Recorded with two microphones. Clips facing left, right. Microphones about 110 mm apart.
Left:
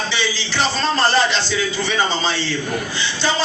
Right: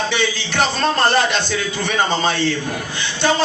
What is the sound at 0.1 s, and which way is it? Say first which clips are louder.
A man's voice: right 2 dB; 55° right (ahead or behind).